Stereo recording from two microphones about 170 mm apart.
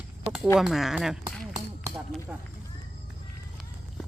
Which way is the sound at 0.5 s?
Centre (ahead or behind).